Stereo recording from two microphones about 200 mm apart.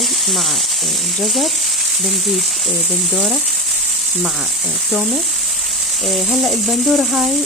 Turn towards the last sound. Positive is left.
turn(degrees=0)  # may be behind; listen again after turning